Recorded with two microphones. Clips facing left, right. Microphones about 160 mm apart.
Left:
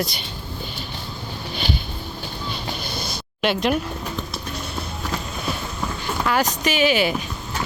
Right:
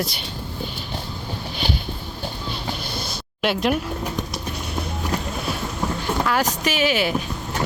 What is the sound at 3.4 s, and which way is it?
Speech, 5° right (ahead or behind).